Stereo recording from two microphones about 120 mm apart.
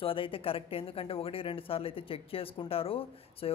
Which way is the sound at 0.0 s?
50° left (ahead or behind).